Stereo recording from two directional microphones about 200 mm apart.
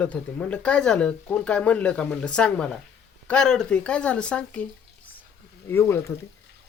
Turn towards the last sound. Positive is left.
turn(degrees=10)  # may be behind; listen again after turning